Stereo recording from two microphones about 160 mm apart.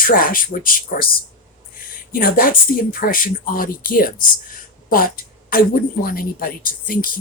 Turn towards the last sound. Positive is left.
turn(degrees=65)  # may be behind; listen again after turning